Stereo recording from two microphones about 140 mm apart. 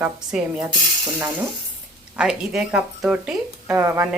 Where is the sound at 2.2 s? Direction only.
5° right (ahead or behind).